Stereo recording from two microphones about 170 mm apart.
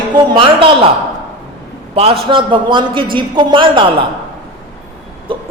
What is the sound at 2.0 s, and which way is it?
A man's voice, 30° right (ahead or behind).